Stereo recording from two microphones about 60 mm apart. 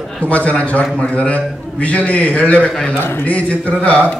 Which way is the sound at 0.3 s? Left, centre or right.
Left.